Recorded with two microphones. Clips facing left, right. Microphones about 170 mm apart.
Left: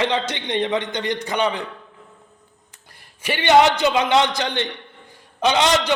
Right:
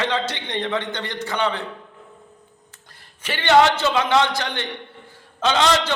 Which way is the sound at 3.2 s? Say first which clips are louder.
Left 1 dB; 15° left (ahead or behind).